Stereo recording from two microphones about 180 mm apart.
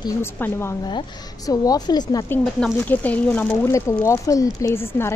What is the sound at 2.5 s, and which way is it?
Speech, 5° left (ahead or behind).